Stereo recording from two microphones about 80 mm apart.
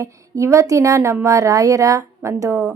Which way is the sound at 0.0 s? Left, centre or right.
Right.